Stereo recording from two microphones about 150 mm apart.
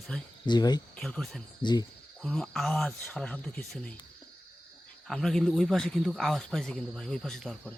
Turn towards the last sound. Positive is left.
turn(degrees=0)  # may be behind; listen again after turning